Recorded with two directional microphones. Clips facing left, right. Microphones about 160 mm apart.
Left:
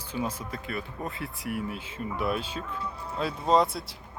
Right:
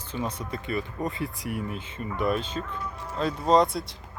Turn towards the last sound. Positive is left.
turn(degrees=5)  # may be behind; listen again after turning